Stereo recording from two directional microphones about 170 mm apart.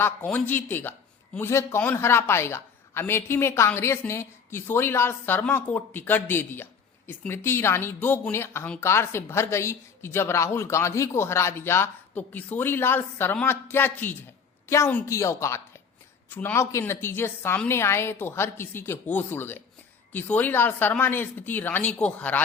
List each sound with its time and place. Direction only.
0.0 s speech: 10° left (ahead or behind)